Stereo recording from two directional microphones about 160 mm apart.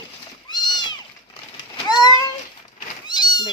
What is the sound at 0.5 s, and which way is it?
Cat, 25° left (ahead or behind).